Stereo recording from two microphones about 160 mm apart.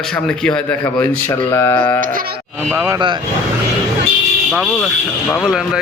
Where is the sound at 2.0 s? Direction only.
65° right (ahead or behind).